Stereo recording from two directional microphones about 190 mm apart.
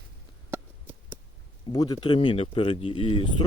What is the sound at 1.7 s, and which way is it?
Speech, 20° left (ahead or behind).